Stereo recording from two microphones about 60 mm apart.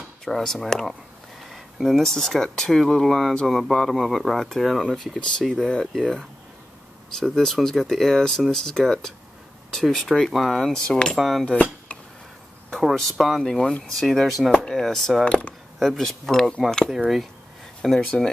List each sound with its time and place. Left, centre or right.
0.2 s speech: centre
5.0 s speech: centre
10.9 s speech: centre
11.1 s speech: centre
12.9 s speech: centre
15.2 s speech: centre
15.8 s speech: centre
16.9 s speech: centre
17.8 s speech: centre